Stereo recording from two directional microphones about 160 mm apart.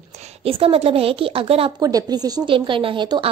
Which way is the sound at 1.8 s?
25° right (ahead or behind).